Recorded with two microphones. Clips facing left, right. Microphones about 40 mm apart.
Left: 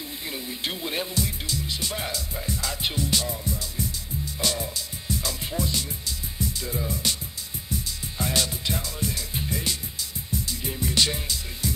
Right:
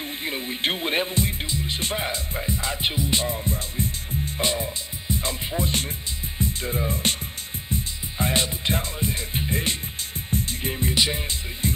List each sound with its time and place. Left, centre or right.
0.0 s speech: right
3.2 s music: right
5.7 s speech: right
7.7 s music: right
11.0 s music: centre
11.6 s music: right